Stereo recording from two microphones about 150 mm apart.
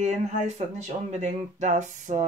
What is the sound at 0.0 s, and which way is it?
Speech, 50° right (ahead or behind).